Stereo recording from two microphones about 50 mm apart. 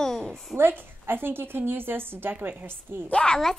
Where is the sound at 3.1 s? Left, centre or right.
Centre.